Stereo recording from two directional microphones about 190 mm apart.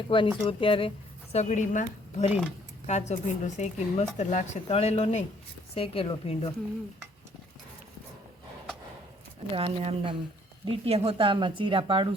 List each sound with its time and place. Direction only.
0.1 s a woman's voice: 25° left (ahead or behind)
9.5 s speech: 30° right (ahead or behind)